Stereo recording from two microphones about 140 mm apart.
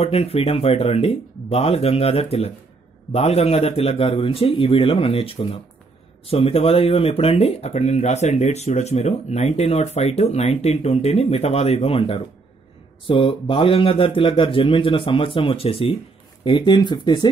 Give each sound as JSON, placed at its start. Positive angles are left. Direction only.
{"t": 0.0, "sound": "speech", "side_deg": 45}